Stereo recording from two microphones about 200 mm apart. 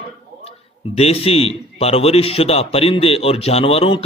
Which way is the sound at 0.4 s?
30° left (ahead or behind).